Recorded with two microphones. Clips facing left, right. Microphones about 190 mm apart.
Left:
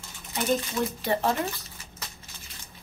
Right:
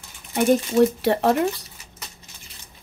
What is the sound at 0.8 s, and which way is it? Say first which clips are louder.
Speech: right 9 dB; 70° right (ahead or behind).